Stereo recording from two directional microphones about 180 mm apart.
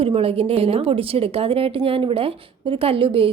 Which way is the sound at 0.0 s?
30° right (ahead or behind).